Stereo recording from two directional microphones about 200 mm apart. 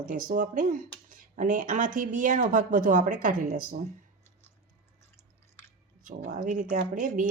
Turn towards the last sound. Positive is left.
turn(degrees=-40)  # may be behind; listen again after turning